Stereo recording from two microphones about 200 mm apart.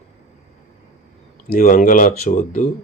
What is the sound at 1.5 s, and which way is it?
Speech, 45° left (ahead or behind).